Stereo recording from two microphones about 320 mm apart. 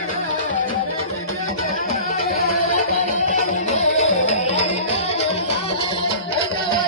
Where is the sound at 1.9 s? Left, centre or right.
Left.